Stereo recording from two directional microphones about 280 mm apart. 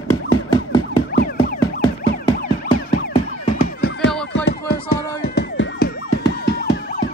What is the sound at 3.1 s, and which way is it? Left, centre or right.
Music, centre.